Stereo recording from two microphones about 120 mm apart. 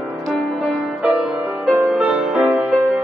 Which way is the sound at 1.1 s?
Centre (ahead or behind).